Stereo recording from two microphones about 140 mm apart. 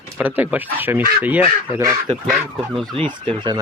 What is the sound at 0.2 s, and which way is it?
Speech, 10° right (ahead or behind).